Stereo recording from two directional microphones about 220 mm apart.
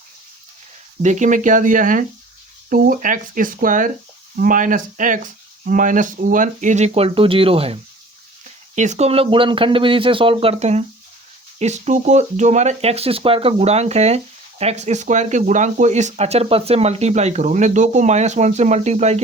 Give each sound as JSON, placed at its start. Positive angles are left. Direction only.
{"t": 1.0, "sound": "speech", "side_deg": -35}